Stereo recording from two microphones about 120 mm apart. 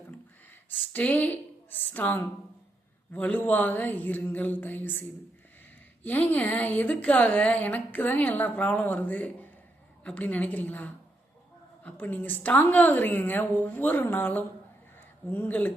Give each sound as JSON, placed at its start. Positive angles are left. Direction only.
{"t": 0.7, "sound": "a woman's voice", "side_deg": 15}